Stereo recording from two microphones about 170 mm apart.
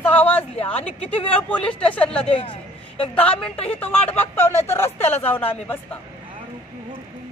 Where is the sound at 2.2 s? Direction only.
35° left (ahead or behind).